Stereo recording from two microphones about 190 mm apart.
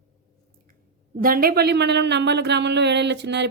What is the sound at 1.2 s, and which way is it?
Speech, 50° right (ahead or behind).